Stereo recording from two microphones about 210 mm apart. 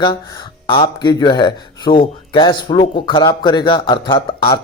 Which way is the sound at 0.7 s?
20° left (ahead or behind).